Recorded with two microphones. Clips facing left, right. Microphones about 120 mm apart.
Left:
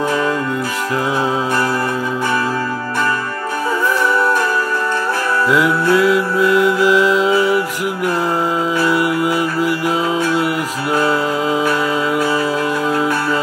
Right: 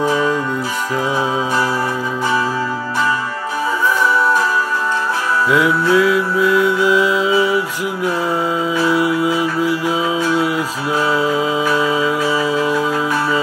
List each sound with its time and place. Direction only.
5.6 s mantra: 60° left (ahead or behind)
10.4 s music: 60° left (ahead or behind)